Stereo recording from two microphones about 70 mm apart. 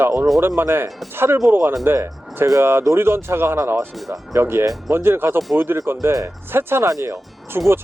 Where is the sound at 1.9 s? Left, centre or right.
Right.